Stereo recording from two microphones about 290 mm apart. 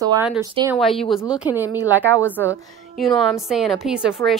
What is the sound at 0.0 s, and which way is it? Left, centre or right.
Speech, centre.